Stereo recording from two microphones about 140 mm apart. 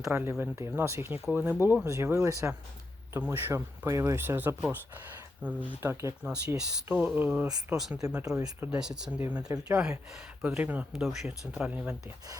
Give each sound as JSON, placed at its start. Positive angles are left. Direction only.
{"t": 0.1, "sound": "speech", "side_deg": -15}